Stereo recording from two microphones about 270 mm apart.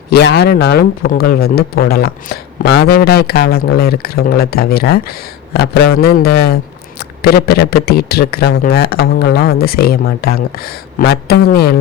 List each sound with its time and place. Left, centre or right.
0.1 s speech: left